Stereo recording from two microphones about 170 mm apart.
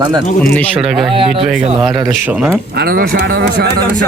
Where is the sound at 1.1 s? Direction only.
30° right (ahead or behind).